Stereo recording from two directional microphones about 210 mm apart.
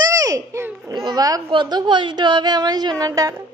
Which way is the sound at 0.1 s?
15° right (ahead or behind).